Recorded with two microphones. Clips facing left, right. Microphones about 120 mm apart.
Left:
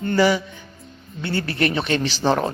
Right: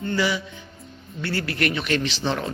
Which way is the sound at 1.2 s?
25° left (ahead or behind).